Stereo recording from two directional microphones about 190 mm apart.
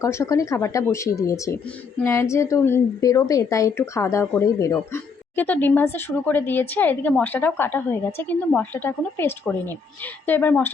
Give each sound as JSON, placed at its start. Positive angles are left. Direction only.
{"t": 0.0, "sound": "speech", "side_deg": 15}